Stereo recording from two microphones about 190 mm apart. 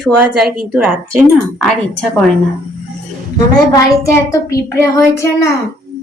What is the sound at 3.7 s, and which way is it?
Child singing, 15° left (ahead or behind).